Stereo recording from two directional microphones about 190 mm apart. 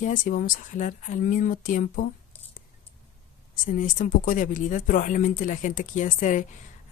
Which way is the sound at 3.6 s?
45° left (ahead or behind).